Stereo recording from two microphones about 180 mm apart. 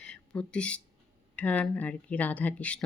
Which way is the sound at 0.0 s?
5° left (ahead or behind).